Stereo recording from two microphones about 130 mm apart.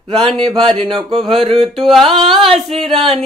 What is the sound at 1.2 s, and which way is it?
Music, centre (ahead or behind).